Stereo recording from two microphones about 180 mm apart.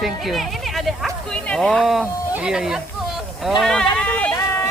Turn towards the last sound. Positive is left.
turn(degrees=5)  # may be behind; listen again after turning